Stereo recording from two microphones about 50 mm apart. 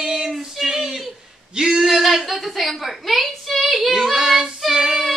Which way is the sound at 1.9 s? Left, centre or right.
Centre.